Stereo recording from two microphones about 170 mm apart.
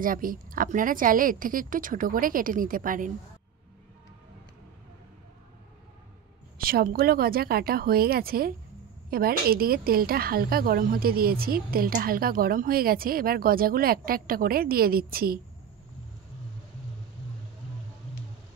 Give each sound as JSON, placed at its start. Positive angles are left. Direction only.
{"t": 0.0, "sound": "a woman's voice", "side_deg": -55}
{"t": 6.6, "sound": "a woman's voice", "side_deg": -60}